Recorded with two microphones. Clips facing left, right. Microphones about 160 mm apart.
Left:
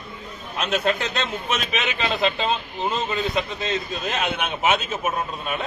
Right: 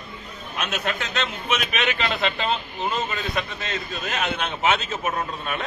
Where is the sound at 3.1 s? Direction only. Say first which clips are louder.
Left 4 dB; 25° left (ahead or behind).